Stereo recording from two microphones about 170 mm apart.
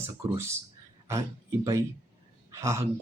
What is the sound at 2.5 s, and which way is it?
Speech, 15° right (ahead or behind).